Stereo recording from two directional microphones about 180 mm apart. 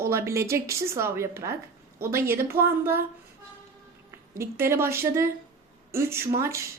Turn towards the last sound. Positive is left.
turn(degrees=-15)  # may be behind; listen again after turning